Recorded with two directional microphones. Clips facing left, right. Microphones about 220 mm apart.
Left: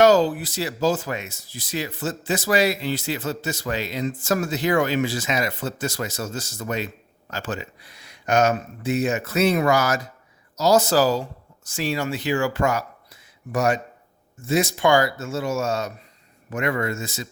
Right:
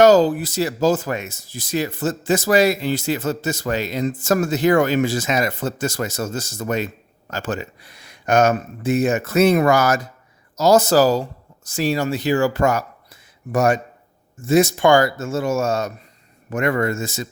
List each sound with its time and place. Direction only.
0.0 s speech: 40° right (ahead or behind)